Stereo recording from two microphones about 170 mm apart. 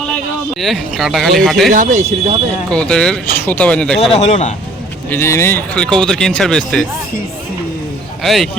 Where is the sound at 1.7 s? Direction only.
50° right (ahead or behind).